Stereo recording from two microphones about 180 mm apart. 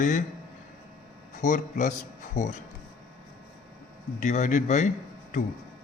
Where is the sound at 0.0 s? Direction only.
45° left (ahead or behind).